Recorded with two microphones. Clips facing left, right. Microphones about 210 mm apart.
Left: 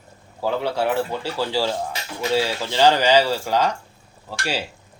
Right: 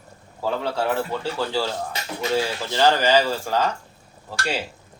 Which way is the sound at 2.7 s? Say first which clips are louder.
Left 2 dB; 15° left (ahead or behind).